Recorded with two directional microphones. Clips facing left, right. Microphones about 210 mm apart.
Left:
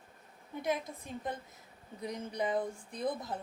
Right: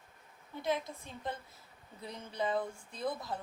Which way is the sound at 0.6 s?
15° left (ahead or behind).